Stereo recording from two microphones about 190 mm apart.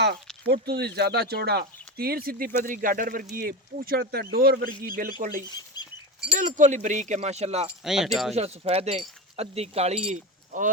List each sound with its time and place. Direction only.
0.4 s speech: 55° right (ahead or behind); by 7.7 s 35° right (ahead or behind)
7.9 s speech: centre (ahead or behind)
8.4 s speech: 30° right (ahead or behind)